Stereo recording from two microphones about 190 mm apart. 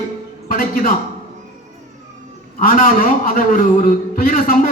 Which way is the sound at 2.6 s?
45° left (ahead or behind).